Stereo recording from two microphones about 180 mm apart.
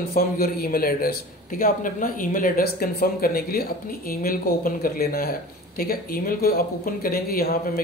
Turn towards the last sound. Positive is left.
turn(degrees=55)  # may be behind; listen again after turning